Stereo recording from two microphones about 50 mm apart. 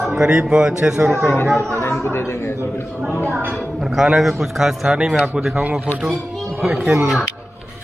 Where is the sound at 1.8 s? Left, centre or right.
Left.